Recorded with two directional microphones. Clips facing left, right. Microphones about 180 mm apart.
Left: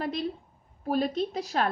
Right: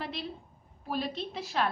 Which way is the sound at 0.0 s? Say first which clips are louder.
Left 7 dB; 45° left (ahead or behind).